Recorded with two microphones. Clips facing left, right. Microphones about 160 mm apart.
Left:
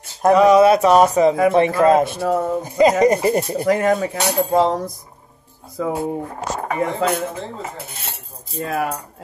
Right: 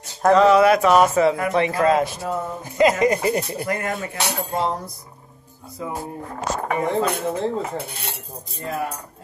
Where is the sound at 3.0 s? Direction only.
40° left (ahead or behind).